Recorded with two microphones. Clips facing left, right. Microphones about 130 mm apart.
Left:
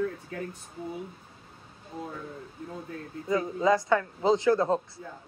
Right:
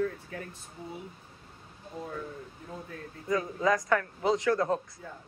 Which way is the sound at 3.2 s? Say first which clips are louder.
Left 3 dB; 25° left (ahead or behind).